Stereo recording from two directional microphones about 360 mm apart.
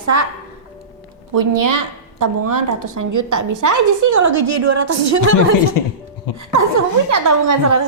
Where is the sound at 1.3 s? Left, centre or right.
Right.